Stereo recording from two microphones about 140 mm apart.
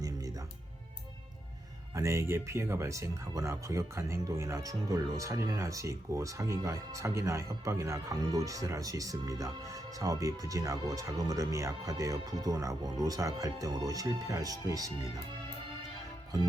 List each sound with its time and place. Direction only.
2.0 s speech: 20° right (ahead or behind)